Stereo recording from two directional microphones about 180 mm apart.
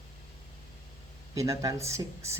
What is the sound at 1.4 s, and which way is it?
Speech, 20° right (ahead or behind).